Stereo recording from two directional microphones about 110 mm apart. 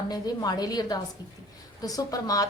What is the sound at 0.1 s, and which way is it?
A woman's voice, 35° left (ahead or behind).